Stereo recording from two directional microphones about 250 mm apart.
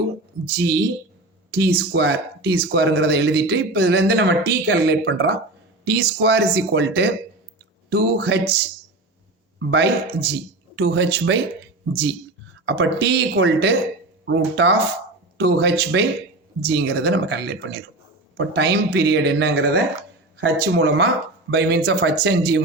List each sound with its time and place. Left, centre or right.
0.5 s speech: right
9.6 s speech: right
12.6 s speech: right